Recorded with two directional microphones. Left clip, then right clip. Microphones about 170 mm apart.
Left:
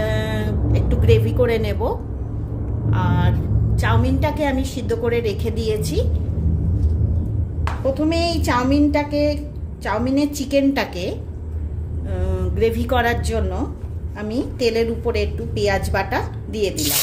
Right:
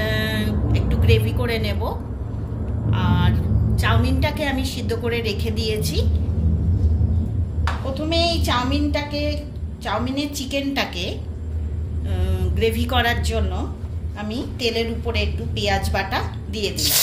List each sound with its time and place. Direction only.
0.0 s vehicle: 55° left (ahead or behind)
2.9 s a woman's voice: 65° left (ahead or behind)
8.1 s child singing: 70° left (ahead or behind)
9.8 s a woman's voice: 70° left (ahead or behind)